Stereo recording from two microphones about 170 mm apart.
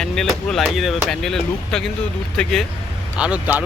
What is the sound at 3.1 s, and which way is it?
Speech, 5° right (ahead or behind).